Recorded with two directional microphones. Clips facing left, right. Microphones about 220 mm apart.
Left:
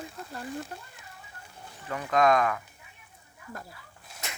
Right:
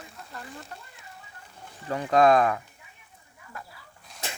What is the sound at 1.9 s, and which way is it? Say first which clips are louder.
Speech: right 4 dB; 35° right (ahead or behind).